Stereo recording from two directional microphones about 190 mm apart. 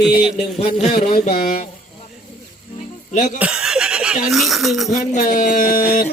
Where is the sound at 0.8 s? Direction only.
35° left (ahead or behind).